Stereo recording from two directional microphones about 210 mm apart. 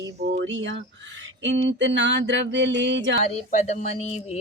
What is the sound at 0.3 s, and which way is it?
Speech, 60° right (ahead or behind).